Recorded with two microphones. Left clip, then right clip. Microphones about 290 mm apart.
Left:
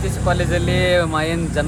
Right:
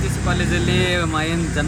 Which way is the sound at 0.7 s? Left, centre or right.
Left.